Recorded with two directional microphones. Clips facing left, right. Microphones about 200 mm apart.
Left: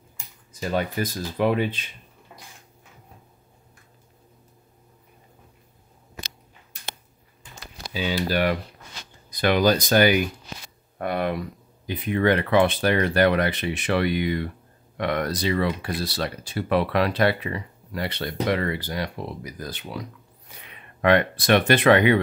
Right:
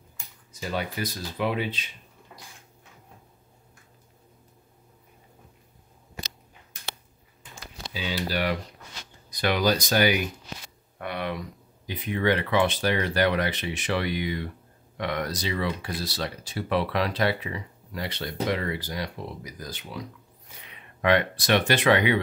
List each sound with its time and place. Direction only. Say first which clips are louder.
0.5 s speech: left 5 dB; 50° left (ahead or behind)
7.9 s speech: left 5 dB; 50° left (ahead or behind)
21.0 s speech: left 3 dB; 55° left (ahead or behind)